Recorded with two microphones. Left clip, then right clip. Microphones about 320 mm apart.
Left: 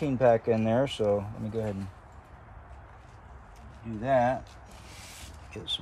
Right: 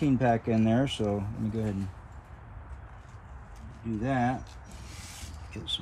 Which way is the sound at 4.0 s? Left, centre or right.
Centre.